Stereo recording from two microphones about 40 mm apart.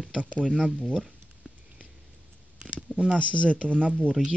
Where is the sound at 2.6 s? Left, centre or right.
Right.